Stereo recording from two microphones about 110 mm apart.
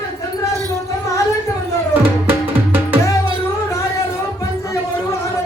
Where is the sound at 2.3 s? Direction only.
20° right (ahead or behind).